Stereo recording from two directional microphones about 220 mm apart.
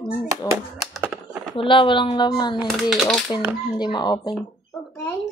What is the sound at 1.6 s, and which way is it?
Speech, 25° left (ahead or behind).